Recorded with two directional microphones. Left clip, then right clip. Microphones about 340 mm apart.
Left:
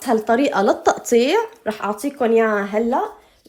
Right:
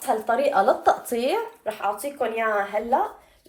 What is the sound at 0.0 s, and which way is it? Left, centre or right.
Speech, left.